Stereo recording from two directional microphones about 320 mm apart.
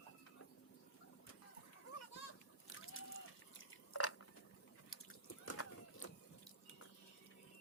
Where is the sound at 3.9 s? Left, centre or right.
Left.